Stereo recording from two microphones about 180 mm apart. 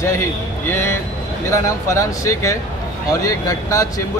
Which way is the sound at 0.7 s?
15° left (ahead or behind).